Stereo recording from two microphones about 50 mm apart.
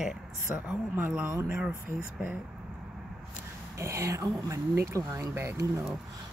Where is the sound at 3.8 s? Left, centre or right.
Right.